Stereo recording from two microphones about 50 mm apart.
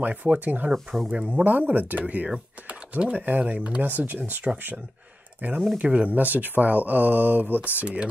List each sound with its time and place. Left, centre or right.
0.0 s speech: right
1.0 s speech: right
1.4 s speech: right
7.8 s speech: right